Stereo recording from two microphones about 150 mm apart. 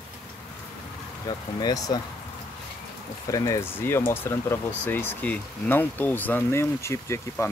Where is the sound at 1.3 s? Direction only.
30° left (ahead or behind).